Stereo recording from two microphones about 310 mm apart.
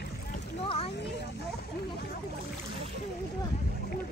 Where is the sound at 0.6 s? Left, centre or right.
Centre.